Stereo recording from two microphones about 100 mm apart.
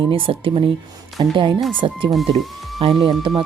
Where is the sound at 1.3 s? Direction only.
50° right (ahead or behind).